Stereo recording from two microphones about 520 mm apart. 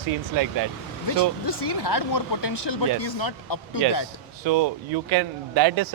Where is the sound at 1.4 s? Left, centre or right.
Left.